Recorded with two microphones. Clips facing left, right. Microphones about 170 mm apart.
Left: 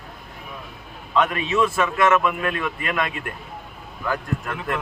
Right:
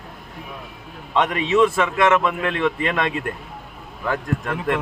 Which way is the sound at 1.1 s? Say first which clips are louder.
Right 3 dB; 25° right (ahead or behind).